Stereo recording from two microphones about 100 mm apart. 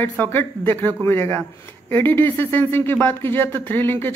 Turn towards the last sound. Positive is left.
turn(degrees=20)  # may be behind; listen again after turning